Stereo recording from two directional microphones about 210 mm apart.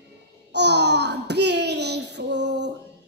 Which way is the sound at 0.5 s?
55° right (ahead or behind).